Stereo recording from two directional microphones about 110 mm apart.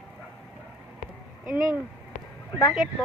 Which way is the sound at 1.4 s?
5° right (ahead or behind).